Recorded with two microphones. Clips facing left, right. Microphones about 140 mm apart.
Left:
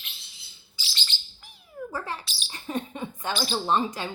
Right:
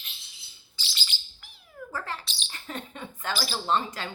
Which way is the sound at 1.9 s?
15° left (ahead or behind).